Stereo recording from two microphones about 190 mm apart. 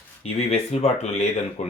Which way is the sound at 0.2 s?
35° left (ahead or behind).